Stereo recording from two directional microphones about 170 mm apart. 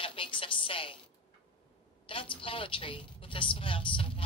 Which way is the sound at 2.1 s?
30° left (ahead or behind).